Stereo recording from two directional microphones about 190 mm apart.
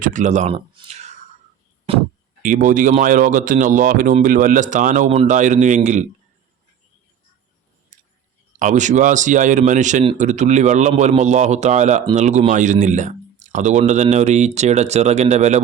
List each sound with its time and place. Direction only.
0.0 s speech: 40° right (ahead or behind)
0.5 s a sound: 25° right (ahead or behind)
2.4 s speech: 40° right (ahead or behind)
7.9 s chewing: 40° right (ahead or behind)
8.5 s speech: 40° right (ahead or behind)